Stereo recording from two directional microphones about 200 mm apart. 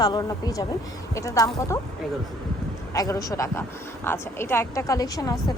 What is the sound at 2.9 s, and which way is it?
A woman's voice, 15° left (ahead or behind).